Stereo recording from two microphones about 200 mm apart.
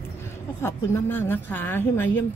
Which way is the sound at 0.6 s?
10° left (ahead or behind).